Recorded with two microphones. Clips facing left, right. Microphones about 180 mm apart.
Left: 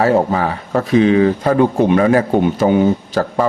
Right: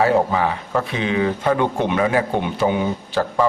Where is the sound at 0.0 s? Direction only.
40° left (ahead or behind).